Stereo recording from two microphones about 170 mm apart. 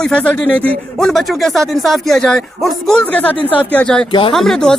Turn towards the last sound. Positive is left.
turn(degrees=0)  # may be behind; listen again after turning